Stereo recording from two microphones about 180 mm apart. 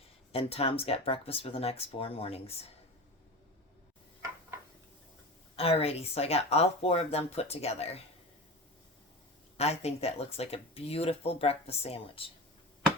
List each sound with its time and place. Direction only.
0.3 s speech: 35° left (ahead or behind)
5.5 s speech: 35° left (ahead or behind)
9.6 s speech: 35° left (ahead or behind)